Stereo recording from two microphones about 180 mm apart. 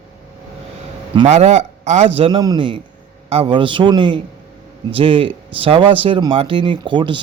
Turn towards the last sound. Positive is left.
turn(degrees=-25)  # may be behind; listen again after turning